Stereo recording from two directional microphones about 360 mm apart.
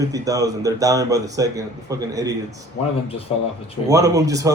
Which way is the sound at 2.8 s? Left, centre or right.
Left.